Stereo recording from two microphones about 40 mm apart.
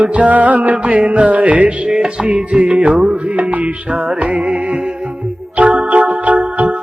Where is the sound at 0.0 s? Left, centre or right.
Right.